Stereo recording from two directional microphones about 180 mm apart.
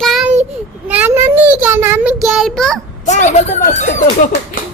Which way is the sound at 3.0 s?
40° left (ahead or behind).